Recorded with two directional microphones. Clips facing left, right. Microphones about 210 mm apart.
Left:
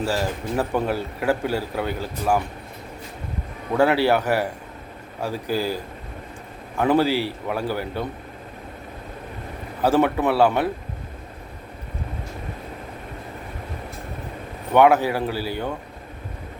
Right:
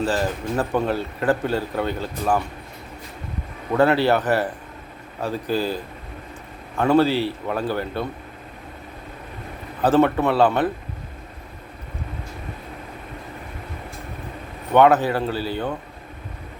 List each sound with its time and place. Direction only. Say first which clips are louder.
0.0 s a man's voice: right 2 dB; 10° left (ahead or behind)
3.8 s a man's voice: right 1 dB; 10° left (ahead or behind)
9.8 s a man's voice: right 2 dB; 15° left (ahead or behind)
14.7 s a man's voice: right 1 dB; 10° left (ahead or behind)